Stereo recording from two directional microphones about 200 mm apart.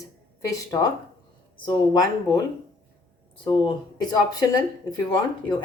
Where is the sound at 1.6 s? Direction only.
20° left (ahead or behind).